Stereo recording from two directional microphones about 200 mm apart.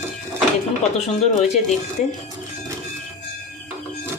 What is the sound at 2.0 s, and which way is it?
Speech, 35° left (ahead or behind).